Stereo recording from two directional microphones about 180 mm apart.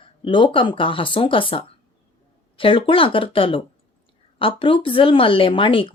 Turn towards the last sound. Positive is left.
turn(degrees=30)  # may be behind; listen again after turning